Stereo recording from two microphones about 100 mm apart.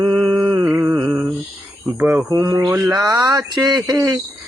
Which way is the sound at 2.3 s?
40° right (ahead or behind).